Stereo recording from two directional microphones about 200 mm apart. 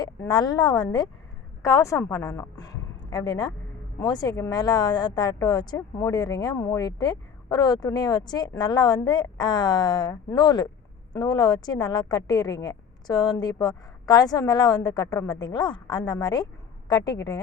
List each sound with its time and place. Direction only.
0.0 s a woman's voice: 20° left (ahead or behind)